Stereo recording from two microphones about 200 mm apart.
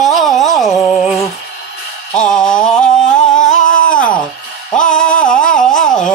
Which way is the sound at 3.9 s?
5° left (ahead or behind).